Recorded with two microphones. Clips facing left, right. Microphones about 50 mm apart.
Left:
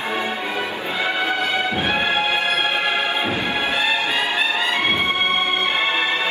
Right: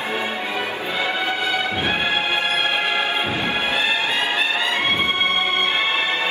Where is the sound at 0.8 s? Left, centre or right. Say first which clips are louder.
Left 2 dB; left.